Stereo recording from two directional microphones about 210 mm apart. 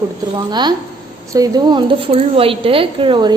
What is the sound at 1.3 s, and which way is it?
A woman's voice, 20° right (ahead or behind).